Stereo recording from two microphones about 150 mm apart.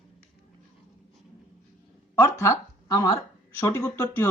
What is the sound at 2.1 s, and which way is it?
Speech, 20° left (ahead or behind).